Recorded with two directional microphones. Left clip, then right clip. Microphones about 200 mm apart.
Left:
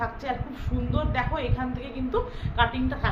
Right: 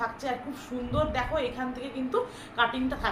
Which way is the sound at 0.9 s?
20° left (ahead or behind).